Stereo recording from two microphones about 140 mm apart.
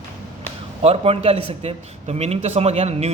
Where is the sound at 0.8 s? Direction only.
45° right (ahead or behind).